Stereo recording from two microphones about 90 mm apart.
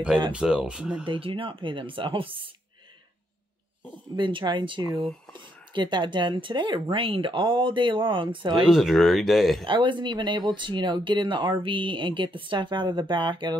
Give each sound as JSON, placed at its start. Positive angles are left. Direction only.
{"t": 0.3, "sound": "speech", "side_deg": -10}
{"t": 1.0, "sound": "speech", "side_deg": -70}
{"t": 4.2, "sound": "speech", "side_deg": -65}
{"t": 8.6, "sound": "speech", "side_deg": -5}
{"t": 9.7, "sound": "speech", "side_deg": -65}